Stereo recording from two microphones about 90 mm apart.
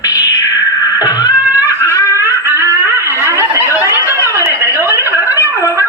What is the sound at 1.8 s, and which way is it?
Snicker, 35° left (ahead or behind).